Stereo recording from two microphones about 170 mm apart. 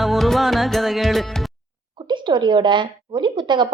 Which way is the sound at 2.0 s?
25° right (ahead or behind).